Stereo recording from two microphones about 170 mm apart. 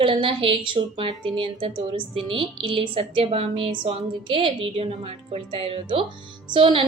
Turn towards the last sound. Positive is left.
turn(degrees=-30)  # may be behind; listen again after turning